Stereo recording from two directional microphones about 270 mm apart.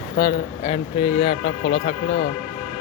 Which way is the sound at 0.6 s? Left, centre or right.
Left.